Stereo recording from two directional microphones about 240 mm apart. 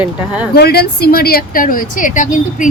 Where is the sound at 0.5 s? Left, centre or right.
Left.